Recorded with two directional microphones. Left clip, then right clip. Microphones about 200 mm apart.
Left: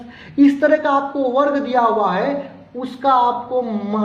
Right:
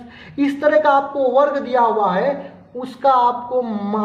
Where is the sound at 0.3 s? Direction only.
10° left (ahead or behind).